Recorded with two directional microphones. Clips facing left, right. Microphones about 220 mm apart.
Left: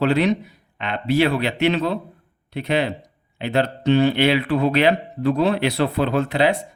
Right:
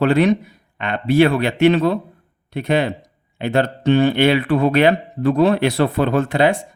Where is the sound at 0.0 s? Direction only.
50° right (ahead or behind).